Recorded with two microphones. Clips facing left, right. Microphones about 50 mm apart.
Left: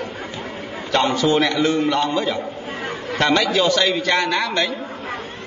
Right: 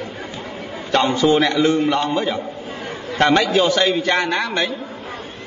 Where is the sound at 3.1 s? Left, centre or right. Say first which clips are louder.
Right 2 dB; right.